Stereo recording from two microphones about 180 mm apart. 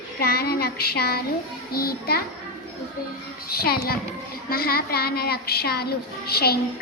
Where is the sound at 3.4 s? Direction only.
60° left (ahead or behind).